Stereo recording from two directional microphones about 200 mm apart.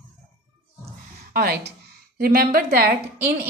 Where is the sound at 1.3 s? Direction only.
50° right (ahead or behind).